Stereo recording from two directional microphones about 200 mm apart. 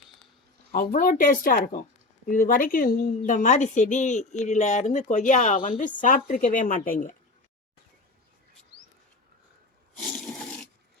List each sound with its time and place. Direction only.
0.7 s speech: 45° left (ahead or behind)